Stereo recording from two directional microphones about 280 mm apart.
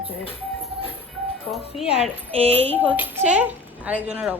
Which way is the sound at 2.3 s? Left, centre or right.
Right.